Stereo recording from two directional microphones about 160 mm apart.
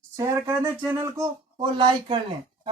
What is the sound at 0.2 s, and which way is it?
A man's voice, 15° right (ahead or behind).